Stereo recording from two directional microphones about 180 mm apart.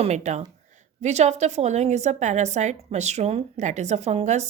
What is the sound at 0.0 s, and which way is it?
A woman's voice, 40° right (ahead or behind).